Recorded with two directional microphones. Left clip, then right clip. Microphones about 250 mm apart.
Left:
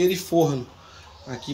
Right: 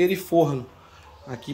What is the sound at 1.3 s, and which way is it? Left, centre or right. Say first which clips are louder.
Speech: left 1 dB; centre.